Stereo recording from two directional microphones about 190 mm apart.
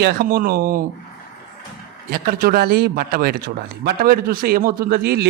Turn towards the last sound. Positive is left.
turn(degrees=-55)  # may be behind; listen again after turning